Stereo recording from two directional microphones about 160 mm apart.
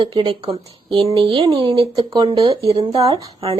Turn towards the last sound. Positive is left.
turn(degrees=-35)  # may be behind; listen again after turning